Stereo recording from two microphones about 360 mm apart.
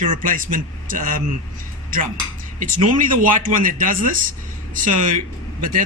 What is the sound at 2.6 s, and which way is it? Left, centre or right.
Speech, right.